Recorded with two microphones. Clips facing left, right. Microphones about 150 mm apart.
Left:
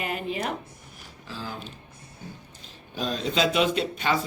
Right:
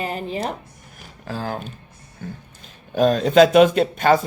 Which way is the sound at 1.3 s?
50° right (ahead or behind).